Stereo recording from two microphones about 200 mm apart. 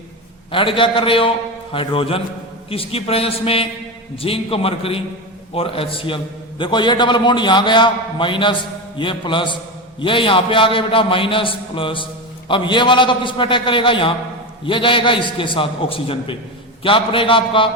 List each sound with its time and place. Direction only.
0.5 s a man's voice: 25° left (ahead or behind)